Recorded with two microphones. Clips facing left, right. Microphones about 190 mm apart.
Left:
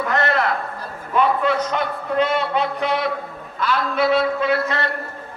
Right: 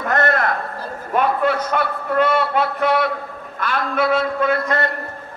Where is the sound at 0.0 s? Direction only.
50° right (ahead or behind).